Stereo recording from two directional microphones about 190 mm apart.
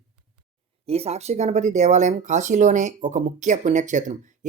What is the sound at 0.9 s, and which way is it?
Speech, 35° right (ahead or behind).